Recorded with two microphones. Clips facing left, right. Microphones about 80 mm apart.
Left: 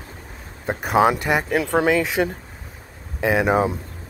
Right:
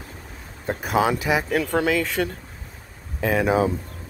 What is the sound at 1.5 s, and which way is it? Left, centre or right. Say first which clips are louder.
Speech: left 5 dB; centre.